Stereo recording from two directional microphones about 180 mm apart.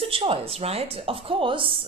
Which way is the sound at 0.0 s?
30° right (ahead or behind).